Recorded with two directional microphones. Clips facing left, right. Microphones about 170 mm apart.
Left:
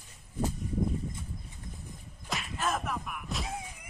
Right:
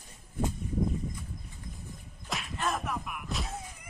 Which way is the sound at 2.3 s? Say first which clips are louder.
Even; centre (ahead or behind).